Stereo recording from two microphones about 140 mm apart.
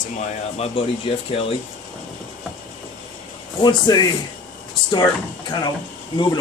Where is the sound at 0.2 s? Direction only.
50° left (ahead or behind).